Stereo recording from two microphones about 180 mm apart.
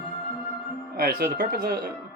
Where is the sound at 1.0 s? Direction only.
60° right (ahead or behind).